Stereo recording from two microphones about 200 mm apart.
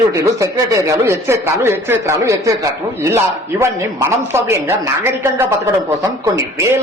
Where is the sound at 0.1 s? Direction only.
15° right (ahead or behind).